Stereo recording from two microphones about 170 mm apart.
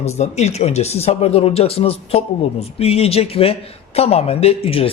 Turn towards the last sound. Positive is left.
turn(degrees=35)  # may be behind; listen again after turning